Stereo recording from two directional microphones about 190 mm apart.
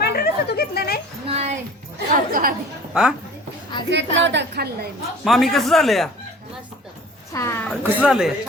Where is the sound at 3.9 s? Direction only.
70° right (ahead or behind).